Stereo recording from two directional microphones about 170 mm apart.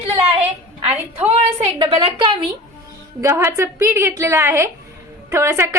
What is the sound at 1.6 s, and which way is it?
Speech, 30° right (ahead or behind).